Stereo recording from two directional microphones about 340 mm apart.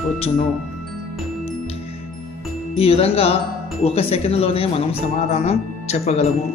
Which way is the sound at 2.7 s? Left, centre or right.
Centre.